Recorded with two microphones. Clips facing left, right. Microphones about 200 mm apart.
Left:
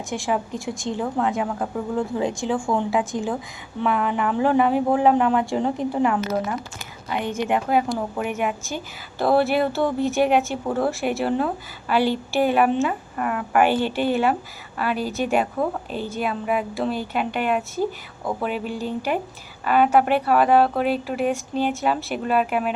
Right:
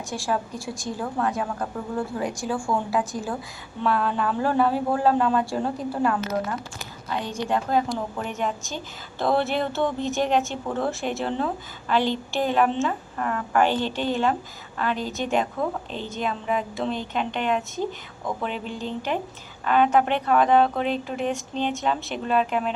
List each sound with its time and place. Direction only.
0.1 s a woman's voice: 20° left (ahead or behind)